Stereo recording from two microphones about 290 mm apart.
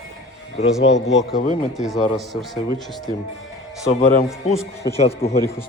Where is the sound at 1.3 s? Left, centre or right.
Left.